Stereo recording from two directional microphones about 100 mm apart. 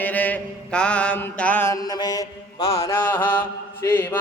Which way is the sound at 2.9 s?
20° left (ahead or behind).